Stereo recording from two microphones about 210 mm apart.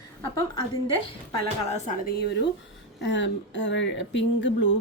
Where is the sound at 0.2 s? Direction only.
15° left (ahead or behind).